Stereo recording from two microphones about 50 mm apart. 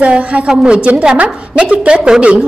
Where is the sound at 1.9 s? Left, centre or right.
Centre.